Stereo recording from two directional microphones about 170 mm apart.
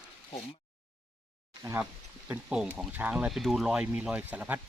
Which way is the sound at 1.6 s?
10° right (ahead or behind).